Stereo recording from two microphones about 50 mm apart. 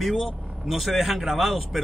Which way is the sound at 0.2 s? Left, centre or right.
Centre.